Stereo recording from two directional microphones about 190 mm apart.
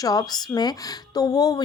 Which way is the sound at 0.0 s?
20° left (ahead or behind).